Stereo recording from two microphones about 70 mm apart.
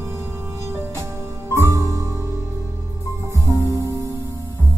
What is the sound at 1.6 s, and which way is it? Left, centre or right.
Music, right.